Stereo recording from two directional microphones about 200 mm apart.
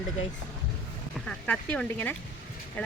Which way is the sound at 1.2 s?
5° left (ahead or behind).